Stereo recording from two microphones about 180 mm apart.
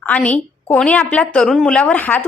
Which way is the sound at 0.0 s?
10° left (ahead or behind).